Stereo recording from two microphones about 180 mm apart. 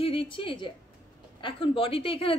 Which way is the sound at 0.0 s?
30° left (ahead or behind).